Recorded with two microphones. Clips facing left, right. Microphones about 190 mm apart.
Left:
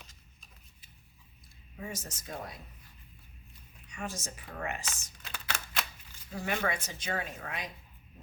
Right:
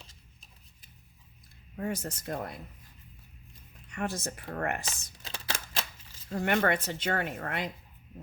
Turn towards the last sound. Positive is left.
turn(degrees=-60)  # may be behind; listen again after turning